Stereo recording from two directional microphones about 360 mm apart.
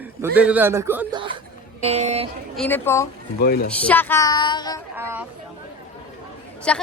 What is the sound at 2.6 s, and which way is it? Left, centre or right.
Speech, centre.